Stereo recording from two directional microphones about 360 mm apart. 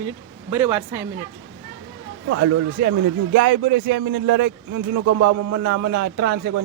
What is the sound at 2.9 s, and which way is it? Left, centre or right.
Speech, right.